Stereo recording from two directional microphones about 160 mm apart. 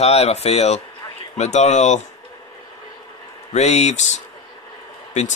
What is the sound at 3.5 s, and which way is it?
Speech, 45° left (ahead or behind).